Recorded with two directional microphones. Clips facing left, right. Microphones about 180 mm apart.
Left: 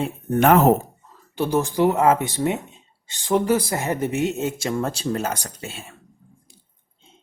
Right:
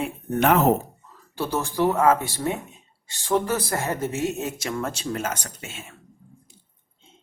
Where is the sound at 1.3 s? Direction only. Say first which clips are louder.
Left 4 dB; 15° left (ahead or behind); by 5.9 s 35° left (ahead or behind).